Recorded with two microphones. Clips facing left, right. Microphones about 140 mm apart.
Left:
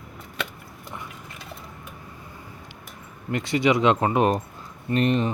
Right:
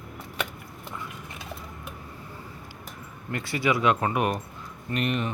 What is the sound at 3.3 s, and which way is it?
Speech, 20° left (ahead or behind).